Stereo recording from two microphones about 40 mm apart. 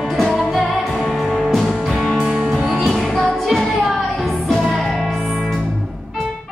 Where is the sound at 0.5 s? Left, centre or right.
Centre.